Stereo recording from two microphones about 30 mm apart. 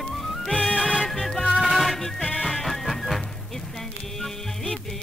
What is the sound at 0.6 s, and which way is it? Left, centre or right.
Music, centre.